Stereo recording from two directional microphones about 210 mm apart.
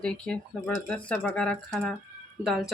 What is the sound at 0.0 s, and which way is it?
Speech, 5° left (ahead or behind).